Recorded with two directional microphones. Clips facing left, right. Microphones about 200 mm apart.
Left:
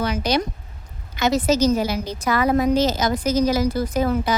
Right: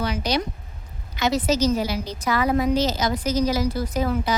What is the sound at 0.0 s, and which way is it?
A woman's voice, 50° left (ahead or behind).